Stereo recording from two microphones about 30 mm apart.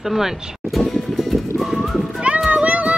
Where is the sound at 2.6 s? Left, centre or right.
Right.